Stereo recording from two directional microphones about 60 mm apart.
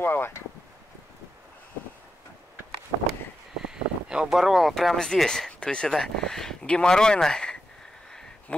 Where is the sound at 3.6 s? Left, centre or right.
Centre.